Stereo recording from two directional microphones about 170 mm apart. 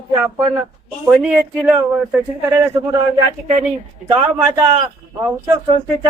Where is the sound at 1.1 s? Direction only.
5° right (ahead or behind).